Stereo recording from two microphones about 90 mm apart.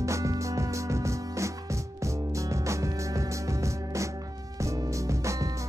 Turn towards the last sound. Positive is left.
turn(degrees=-35)  # may be behind; listen again after turning